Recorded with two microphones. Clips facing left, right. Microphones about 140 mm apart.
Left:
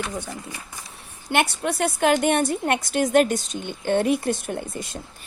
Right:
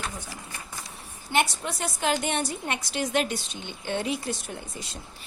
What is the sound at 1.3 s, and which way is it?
A woman's voice, 65° left (ahead or behind).